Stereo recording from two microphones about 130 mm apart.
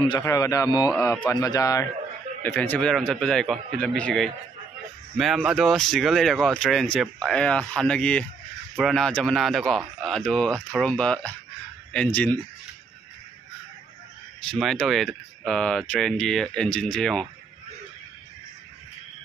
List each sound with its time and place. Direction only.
0.2 s speech: 25° left (ahead or behind)
2.4 s speech: 15° left (ahead or behind)
14.4 s speech: 5° left (ahead or behind)